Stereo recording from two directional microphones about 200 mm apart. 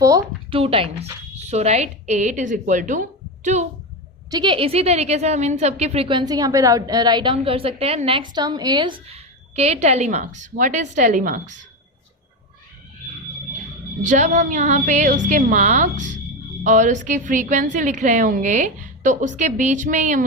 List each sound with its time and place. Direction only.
0.0 s speech: 15° right (ahead or behind)
0.5 s a woman's voice: 25° right (ahead or behind)
4.3 s a woman's voice: 20° right (ahead or behind); by 11.6 s 40° right (ahead or behind)
14.0 s a woman's voice: 40° right (ahead or behind)